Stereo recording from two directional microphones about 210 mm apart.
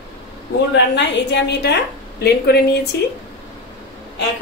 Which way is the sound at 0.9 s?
55° left (ahead or behind).